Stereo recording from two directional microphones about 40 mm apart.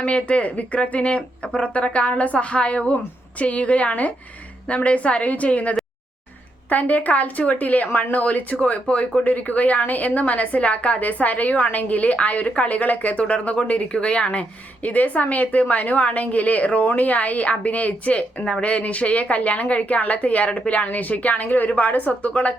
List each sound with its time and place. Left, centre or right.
0.0 s a woman's voice: left
14.8 s a woman's voice: left
20.8 s a woman's voice: left